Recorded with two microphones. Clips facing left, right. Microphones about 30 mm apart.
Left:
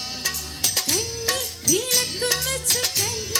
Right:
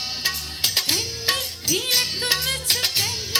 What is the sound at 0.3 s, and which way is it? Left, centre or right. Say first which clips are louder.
Music: right 2 dB; right.